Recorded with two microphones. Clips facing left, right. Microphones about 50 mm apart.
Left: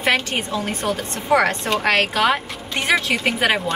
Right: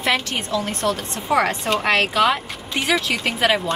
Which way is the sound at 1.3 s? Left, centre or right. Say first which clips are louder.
Left 1 dB; left.